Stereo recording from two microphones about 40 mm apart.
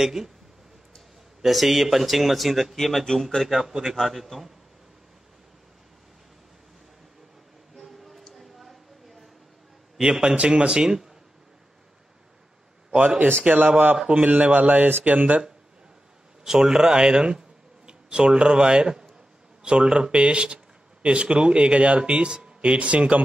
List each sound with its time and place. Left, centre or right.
0.0 s speech: centre
1.4 s a man's voice: centre
3.4 s speech: centre
4.0 s a man's voice: centre
7.7 s a sound: centre
9.9 s a man's voice: centre
12.9 s a man's voice: right
16.4 s a man's voice: centre; by 23.2 s right